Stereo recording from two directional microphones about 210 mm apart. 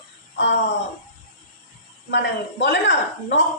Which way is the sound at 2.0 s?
60° left (ahead or behind).